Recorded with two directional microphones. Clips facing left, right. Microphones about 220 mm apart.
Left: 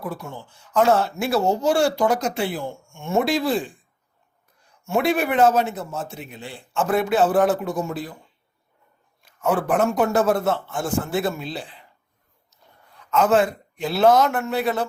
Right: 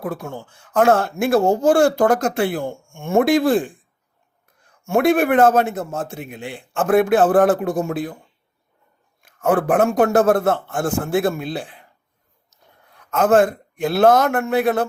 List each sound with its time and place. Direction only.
0.1 s speech: 50° right (ahead or behind)
4.9 s speech: 50° right (ahead or behind)
9.2 s speech: 50° right (ahead or behind)
13.0 s speech: 50° right (ahead or behind)